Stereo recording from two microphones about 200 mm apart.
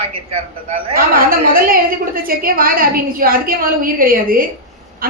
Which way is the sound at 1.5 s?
45° right (ahead or behind).